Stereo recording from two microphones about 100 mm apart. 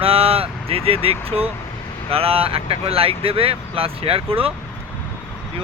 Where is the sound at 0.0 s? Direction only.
75° right (ahead or behind).